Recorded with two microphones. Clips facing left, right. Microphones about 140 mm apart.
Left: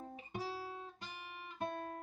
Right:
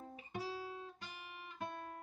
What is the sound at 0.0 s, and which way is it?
Guitar, 25° left (ahead or behind).